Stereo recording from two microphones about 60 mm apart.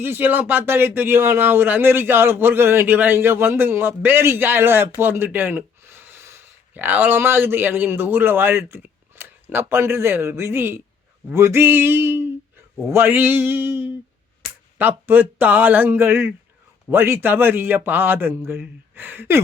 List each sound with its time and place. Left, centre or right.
0.0 s speech: right
5.1 s a sound: right
6.7 s a man's voice: right